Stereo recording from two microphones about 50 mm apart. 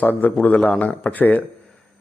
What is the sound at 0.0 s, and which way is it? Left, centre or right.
Speech, left.